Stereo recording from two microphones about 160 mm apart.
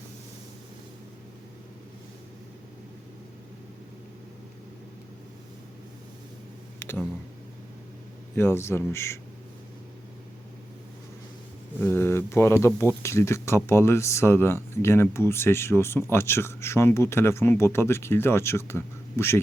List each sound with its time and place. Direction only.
6.7 s a sound: 15° left (ahead or behind)
8.4 s speech: 15° left (ahead or behind)
11.8 s speech: 15° left (ahead or behind)